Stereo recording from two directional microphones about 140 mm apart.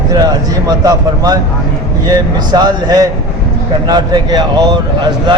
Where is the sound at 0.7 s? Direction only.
25° right (ahead or behind).